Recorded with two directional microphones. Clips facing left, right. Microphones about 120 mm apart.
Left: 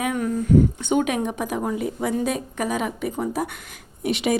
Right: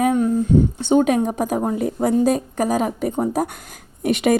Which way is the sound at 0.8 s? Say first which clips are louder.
Right 5 dB; 35° right (ahead or behind).